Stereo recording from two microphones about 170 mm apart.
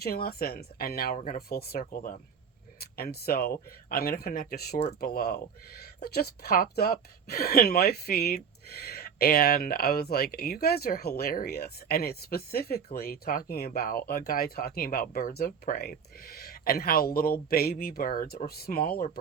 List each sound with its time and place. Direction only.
0.0 s a woman's voice: 65° left (ahead or behind)